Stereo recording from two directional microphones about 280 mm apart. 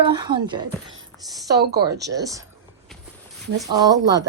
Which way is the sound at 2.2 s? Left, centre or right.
Centre.